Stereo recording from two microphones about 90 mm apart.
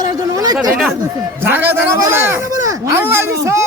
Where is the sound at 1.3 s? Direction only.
25° right (ahead or behind).